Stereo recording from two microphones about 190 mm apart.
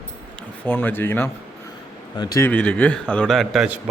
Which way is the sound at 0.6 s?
10° left (ahead or behind).